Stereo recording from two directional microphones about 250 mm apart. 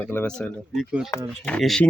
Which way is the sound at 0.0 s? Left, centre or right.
Centre.